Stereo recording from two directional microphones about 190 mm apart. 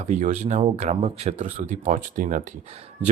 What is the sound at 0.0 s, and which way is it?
Speech, 40° right (ahead or behind).